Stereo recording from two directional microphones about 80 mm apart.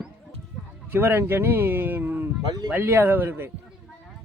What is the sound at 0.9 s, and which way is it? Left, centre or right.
Speech, right.